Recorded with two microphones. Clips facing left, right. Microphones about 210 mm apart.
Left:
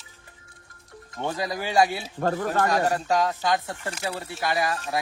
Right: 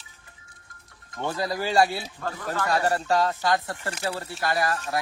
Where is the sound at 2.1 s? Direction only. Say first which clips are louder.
Left 10 dB; 55° left (ahead or behind).